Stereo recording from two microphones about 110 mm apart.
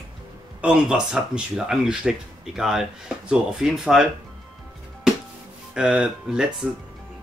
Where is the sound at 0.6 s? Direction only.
10° right (ahead or behind).